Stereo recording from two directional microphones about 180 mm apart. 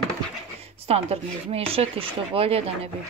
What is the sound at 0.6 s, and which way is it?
Speech, 35° right (ahead or behind).